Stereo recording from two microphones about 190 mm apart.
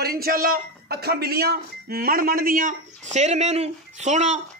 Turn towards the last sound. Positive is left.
turn(degrees=-40)  # may be behind; listen again after turning